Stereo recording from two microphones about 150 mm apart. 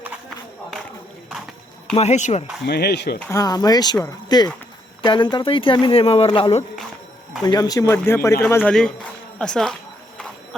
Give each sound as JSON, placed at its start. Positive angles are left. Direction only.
{"t": 2.0, "sound": "speech", "side_deg": 50}
{"t": 2.6, "sound": "speech", "side_deg": 90}
{"t": 3.2, "sound": "speech", "side_deg": 20}
{"t": 7.4, "sound": "speech", "side_deg": 25}
{"t": 9.4, "sound": "speech", "side_deg": 5}